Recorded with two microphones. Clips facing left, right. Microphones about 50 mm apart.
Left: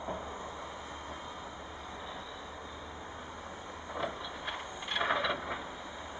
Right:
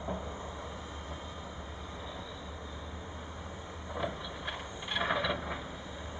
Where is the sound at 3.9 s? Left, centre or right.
Centre.